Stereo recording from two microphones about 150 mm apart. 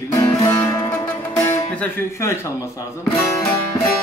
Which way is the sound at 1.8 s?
15° left (ahead or behind).